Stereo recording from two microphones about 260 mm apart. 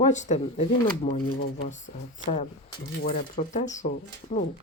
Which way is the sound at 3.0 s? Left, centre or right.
Left.